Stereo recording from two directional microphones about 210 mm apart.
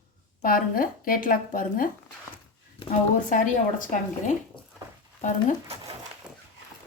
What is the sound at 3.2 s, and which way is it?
Speech, 40° left (ahead or behind).